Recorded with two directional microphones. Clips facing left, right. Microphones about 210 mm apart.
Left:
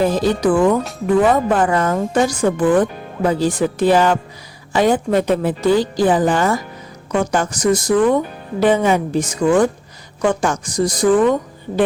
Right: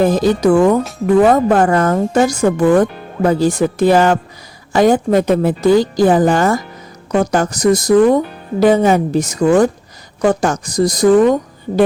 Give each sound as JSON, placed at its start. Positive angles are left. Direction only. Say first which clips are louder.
{"t": 0.0, "sound": "a woman's voice", "louder": "right 3 dB", "side_deg": -45}